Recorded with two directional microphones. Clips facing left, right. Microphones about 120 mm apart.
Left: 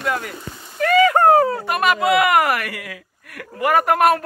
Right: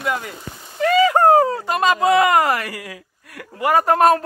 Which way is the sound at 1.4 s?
30° right (ahead or behind).